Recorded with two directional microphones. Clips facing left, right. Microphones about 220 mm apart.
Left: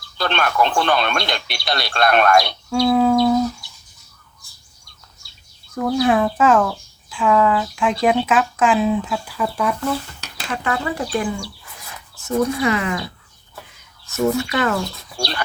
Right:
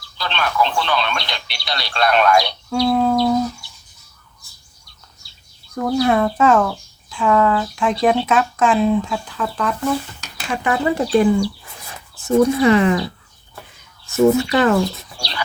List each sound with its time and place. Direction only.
0.2 s speech: 50° left (ahead or behind)
2.6 s speech: centre (ahead or behind)
5.7 s speech: centre (ahead or behind)
10.5 s speech: 15° right (ahead or behind)
12.3 s speech: 30° right (ahead or behind)
14.2 s speech: 25° right (ahead or behind)